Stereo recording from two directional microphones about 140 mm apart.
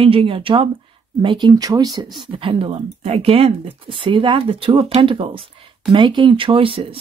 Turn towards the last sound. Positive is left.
turn(degrees=-40)  # may be behind; listen again after turning